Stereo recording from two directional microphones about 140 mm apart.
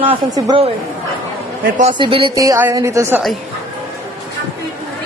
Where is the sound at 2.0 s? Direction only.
35° right (ahead or behind).